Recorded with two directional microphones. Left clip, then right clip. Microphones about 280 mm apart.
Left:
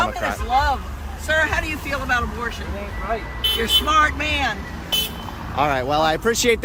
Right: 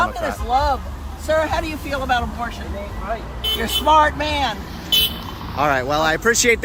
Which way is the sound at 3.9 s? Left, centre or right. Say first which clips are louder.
Right 3 dB; centre.